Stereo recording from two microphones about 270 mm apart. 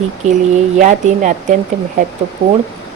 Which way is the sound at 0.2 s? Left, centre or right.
Right.